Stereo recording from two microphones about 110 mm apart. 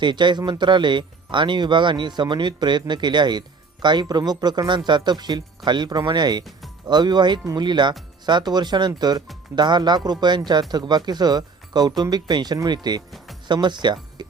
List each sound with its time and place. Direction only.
0.0 s speech: 45° right (ahead or behind)